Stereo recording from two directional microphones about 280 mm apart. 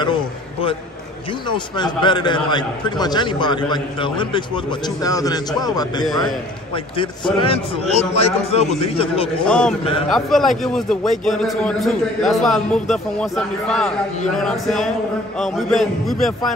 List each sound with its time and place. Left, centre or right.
1.8 s a man's voice: centre
9.5 s a man's voice: centre